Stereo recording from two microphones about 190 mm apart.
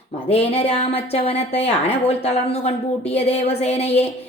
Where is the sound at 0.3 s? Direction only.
35° left (ahead or behind).